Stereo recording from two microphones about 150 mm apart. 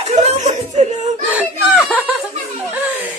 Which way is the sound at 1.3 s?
5° right (ahead or behind).